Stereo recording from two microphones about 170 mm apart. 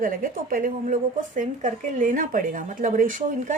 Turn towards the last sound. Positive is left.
turn(degrees=-50)  # may be behind; listen again after turning